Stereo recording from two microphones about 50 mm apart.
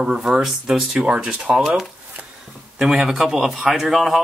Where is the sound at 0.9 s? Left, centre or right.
Right.